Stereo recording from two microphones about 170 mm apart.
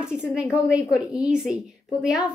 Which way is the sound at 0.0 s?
5° right (ahead or behind).